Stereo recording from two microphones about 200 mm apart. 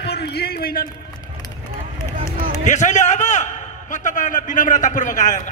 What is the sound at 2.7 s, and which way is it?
A man's voice, 35° left (ahead or behind).